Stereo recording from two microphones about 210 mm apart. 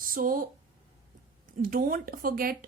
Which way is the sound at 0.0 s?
40° right (ahead or behind).